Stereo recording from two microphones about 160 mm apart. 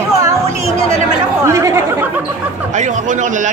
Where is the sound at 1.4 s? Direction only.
15° right (ahead or behind).